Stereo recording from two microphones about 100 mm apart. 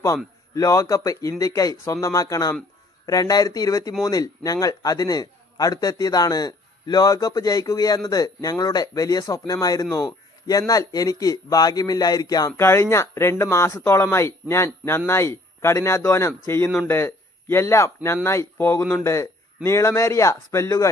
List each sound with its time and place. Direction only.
0.5 s a man's voice: 35° left (ahead or behind)
12.5 s speech: 25° left (ahead or behind)